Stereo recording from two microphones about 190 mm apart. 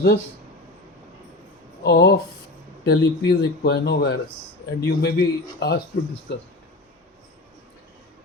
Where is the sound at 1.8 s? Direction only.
65° left (ahead or behind).